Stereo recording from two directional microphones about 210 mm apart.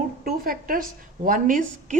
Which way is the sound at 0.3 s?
40° right (ahead or behind).